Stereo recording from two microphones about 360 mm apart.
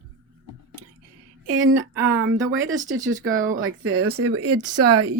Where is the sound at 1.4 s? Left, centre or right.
Right.